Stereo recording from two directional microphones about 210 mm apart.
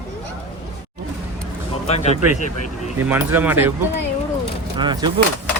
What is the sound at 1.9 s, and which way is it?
Speech, 30° left (ahead or behind).